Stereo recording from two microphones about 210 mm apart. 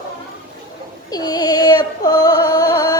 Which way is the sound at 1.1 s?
20° left (ahead or behind).